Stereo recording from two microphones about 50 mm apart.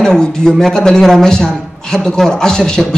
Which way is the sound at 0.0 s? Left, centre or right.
Centre.